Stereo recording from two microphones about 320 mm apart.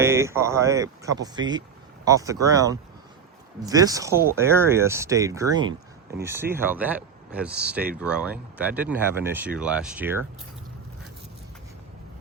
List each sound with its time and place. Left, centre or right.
0.0 s speech: centre